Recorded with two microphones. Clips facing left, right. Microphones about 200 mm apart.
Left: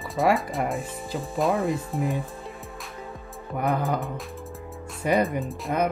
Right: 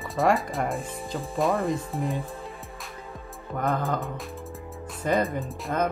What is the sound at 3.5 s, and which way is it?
Speech, 15° left (ahead or behind).